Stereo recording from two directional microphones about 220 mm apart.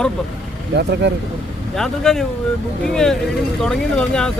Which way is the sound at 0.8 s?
50° right (ahead or behind).